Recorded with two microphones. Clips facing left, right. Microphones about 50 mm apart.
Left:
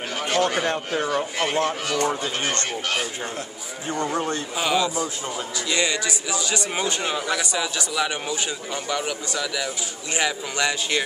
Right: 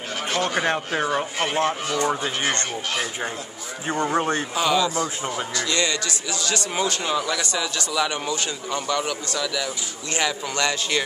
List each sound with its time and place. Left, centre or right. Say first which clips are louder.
0.6 s a man's voice: right 1 dB; right
4.1 s speech: right 3 dB; right
4.6 s a man's voice: right 1 dB; centre